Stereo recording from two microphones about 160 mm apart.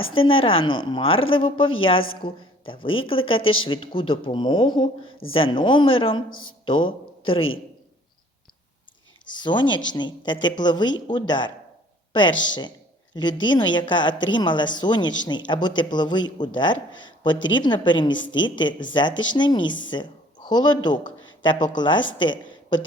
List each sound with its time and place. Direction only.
0.1 s a woman's voice: 35° left (ahead or behind)
9.2 s a woman's voice: 30° left (ahead or behind)